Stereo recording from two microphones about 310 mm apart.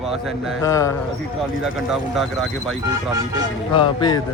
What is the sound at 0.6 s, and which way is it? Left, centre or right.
Speech, centre.